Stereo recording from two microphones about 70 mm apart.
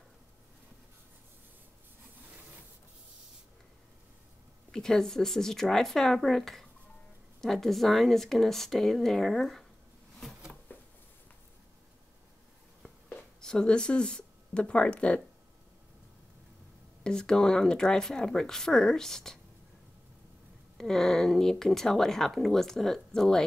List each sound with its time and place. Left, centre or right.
2.2 s rub: right
4.6 s speech: centre
10.7 s a sound: left
13.1 s speech: centre
17.0 s speech: centre
20.7 s speech: centre